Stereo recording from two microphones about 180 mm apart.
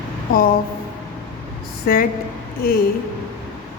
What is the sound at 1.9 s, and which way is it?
Speech, 55° left (ahead or behind).